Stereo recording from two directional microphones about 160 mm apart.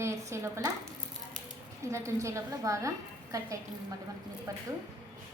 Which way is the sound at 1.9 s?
20° right (ahead or behind).